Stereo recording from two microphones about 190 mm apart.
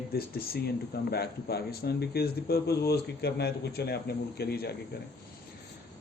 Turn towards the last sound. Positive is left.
turn(degrees=55)  # may be behind; listen again after turning